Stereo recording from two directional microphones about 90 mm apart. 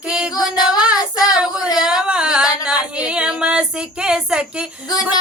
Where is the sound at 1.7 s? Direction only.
5° right (ahead or behind).